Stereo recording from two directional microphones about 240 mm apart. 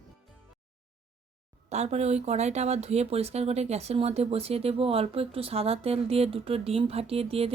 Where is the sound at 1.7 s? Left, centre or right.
Right.